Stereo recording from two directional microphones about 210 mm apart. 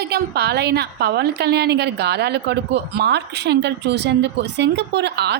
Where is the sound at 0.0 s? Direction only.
50° right (ahead or behind).